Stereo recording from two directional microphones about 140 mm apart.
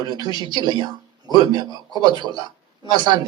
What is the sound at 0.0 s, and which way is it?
Speech, 30° right (ahead or behind).